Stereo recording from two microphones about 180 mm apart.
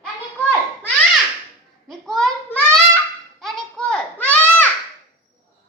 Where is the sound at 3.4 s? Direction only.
5° left (ahead or behind).